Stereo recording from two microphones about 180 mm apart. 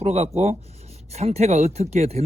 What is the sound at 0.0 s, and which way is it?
Speech, 35° right (ahead or behind).